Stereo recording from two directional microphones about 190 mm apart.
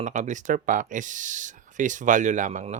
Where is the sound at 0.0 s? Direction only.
40° right (ahead or behind).